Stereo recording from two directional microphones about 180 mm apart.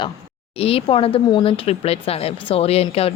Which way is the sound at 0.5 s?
30° left (ahead or behind).